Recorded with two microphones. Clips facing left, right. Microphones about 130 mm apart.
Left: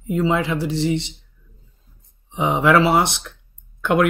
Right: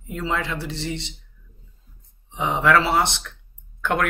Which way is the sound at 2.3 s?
15° left (ahead or behind).